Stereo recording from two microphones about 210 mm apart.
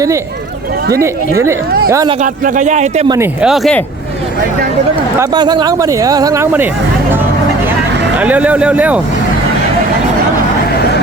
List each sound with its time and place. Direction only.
1.9 s speech: 15° right (ahead or behind)
2.2 s speech: 40° right (ahead or behind)
3.4 s speech: centre (ahead or behind)
5.2 s speech: 20° right (ahead or behind)
8.2 s speech: 5° right (ahead or behind)